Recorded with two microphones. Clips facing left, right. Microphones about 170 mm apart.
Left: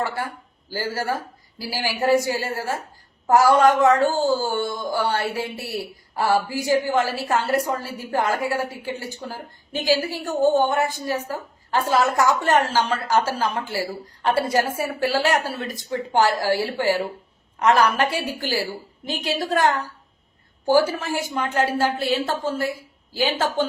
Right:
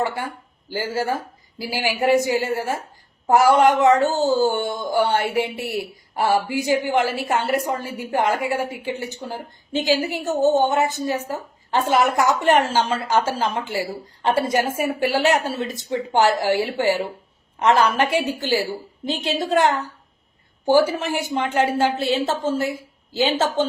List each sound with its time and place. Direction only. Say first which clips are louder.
0.7 s a woman's voice: right 2 dB; 15° right (ahead or behind)